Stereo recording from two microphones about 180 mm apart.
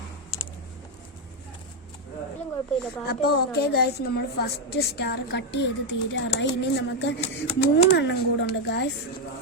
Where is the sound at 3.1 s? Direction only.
60° left (ahead or behind).